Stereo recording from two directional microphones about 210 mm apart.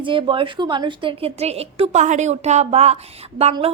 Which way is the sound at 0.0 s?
25° right (ahead or behind).